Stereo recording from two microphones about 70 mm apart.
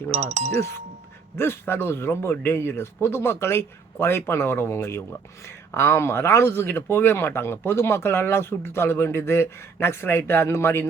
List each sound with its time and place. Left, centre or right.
1.4 s speech: left